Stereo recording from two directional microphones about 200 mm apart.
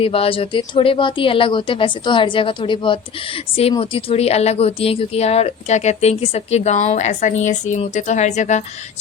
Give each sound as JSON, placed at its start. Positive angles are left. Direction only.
{"t": 0.0, "sound": "speech", "side_deg": 30}